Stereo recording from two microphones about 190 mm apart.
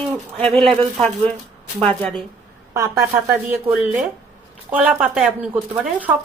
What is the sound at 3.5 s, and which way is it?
Speech, 5° right (ahead or behind).